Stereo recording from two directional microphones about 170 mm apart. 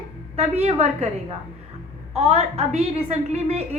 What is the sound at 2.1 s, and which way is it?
A woman's voice, 35° right (ahead or behind).